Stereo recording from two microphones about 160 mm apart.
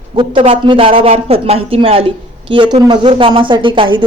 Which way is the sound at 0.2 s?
35° right (ahead or behind).